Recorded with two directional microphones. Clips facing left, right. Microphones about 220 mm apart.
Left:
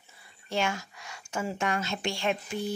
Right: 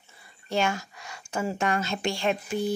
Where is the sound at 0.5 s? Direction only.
40° right (ahead or behind).